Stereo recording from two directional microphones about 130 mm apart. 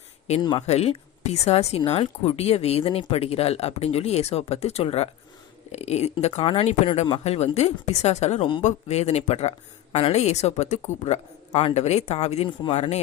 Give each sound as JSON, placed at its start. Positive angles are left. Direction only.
{"t": 0.3, "sound": "speech", "side_deg": 60}